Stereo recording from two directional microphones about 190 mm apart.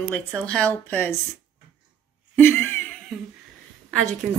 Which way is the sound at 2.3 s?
10° left (ahead or behind).